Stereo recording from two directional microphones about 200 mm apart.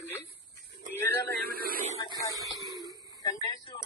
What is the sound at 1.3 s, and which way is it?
Speech, 50° right (ahead or behind).